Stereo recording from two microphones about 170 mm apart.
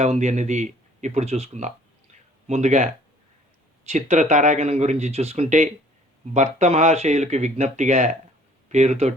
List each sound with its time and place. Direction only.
0.0 s speech: 40° right (ahead or behind)